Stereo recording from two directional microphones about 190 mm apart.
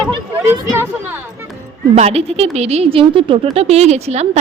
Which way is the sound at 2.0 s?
30° right (ahead or behind).